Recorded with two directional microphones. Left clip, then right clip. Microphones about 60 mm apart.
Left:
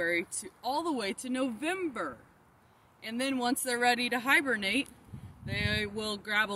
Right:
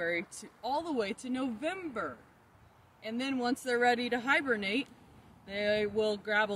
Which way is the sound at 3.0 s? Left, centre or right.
Right.